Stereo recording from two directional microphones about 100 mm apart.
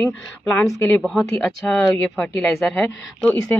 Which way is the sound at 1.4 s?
15° left (ahead or behind).